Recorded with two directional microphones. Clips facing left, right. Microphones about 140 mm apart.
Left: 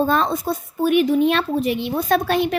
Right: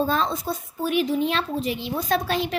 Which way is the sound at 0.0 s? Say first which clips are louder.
Left 4 dB; 60° left (ahead or behind).